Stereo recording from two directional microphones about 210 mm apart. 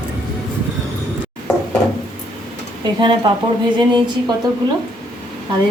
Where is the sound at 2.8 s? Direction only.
20° right (ahead or behind).